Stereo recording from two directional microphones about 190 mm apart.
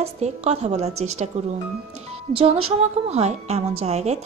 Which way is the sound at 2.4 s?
30° right (ahead or behind).